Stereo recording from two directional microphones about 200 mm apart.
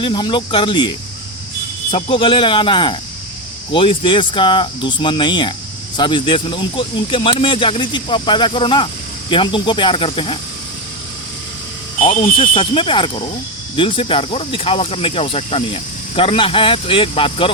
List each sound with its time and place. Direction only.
0.0 s speech: 25° left (ahead or behind)
1.9 s speech: 30° left (ahead or behind)
12.0 s speech: 30° left (ahead or behind)